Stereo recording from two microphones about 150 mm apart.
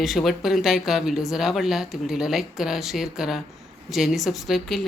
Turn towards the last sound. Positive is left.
turn(degrees=0)  # may be behind; listen again after turning